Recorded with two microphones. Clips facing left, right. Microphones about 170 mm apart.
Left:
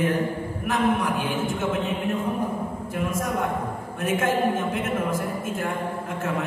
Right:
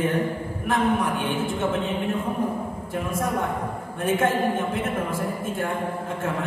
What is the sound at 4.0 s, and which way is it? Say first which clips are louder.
A woman's voice: right 1 dB; 30° right (ahead or behind).